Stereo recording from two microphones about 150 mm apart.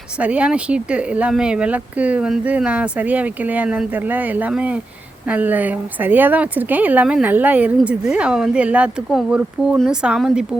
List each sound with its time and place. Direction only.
0.2 s a woman's voice: 10° right (ahead or behind)